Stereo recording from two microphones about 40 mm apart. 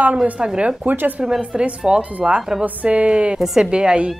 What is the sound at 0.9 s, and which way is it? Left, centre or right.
Speech, right.